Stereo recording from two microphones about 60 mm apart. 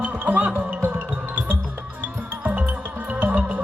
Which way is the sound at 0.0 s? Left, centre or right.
Right.